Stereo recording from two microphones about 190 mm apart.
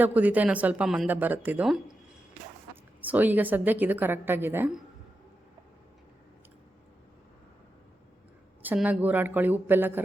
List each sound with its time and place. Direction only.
0.0 s speech: 10° right (ahead or behind)
3.0 s speech: 10° right (ahead or behind)
8.6 s speech: 5° right (ahead or behind)